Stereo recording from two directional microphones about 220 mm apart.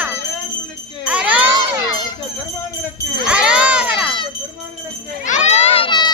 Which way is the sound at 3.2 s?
5° right (ahead or behind).